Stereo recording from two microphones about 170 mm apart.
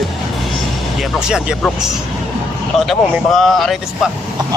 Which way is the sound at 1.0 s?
5° right (ahead or behind).